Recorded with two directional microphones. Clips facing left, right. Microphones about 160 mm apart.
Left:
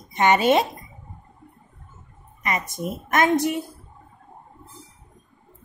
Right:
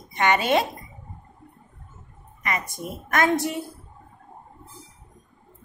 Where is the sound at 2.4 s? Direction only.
20° left (ahead or behind).